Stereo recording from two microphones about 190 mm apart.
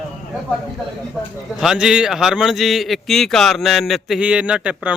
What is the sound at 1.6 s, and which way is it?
A man's voice, 5° right (ahead or behind).